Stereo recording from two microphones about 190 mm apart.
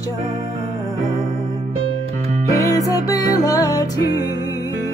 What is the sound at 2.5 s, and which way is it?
Music, 15° left (ahead or behind).